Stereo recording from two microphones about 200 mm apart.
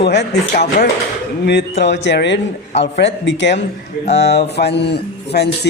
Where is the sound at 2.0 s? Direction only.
60° left (ahead or behind).